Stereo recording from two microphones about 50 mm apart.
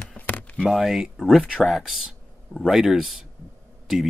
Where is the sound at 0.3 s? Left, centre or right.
Left.